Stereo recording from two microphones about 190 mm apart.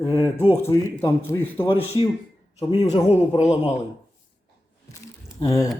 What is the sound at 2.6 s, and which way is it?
Speech, 20° left (ahead or behind).